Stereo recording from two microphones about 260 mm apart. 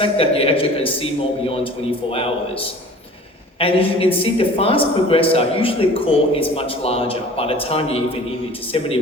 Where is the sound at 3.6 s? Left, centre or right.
Left.